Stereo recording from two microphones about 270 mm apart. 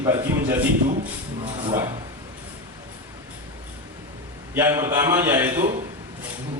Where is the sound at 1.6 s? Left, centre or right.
Centre.